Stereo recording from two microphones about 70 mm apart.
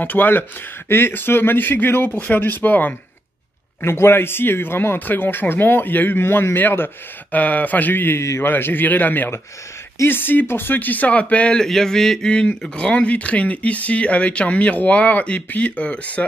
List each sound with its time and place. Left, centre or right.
0.0 s speech: left
3.8 s speech: left
8.2 s a man's voice: left
8.5 s speech: left
11.6 s speech: centre